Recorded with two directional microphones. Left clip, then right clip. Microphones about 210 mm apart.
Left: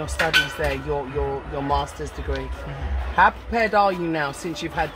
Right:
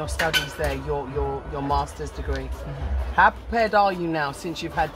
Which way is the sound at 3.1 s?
25° left (ahead or behind).